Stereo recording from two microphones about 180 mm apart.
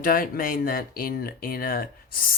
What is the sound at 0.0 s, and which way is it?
Speech, 50° left (ahead or behind).